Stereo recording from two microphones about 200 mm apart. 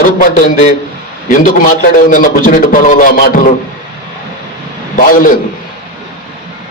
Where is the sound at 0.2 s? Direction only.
40° left (ahead or behind).